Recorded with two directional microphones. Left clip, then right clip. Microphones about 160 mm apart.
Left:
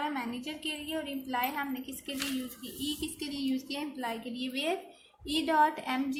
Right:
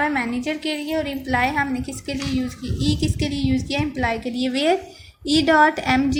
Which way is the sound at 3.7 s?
35° right (ahead or behind).